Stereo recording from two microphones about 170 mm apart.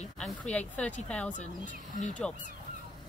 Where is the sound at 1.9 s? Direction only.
50° left (ahead or behind).